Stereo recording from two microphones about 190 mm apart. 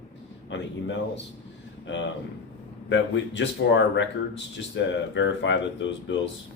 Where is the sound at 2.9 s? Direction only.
70° left (ahead or behind).